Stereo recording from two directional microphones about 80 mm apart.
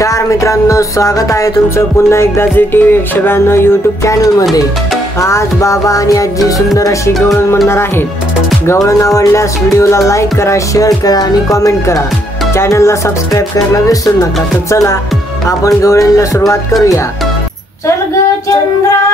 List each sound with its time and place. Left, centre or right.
0.0 s music: left
5.2 s speech: left
7.2 s music: centre
8.6 s music: left
14.7 s music: left
15.4 s speech: left